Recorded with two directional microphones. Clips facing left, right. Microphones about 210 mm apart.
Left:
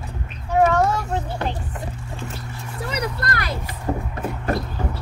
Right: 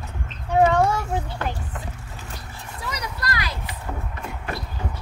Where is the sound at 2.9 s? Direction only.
60° left (ahead or behind).